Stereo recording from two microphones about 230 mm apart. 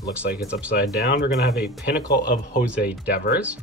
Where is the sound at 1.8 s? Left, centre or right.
Left.